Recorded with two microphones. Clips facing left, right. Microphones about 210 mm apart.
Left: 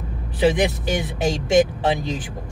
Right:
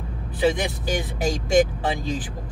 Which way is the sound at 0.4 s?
20° left (ahead or behind).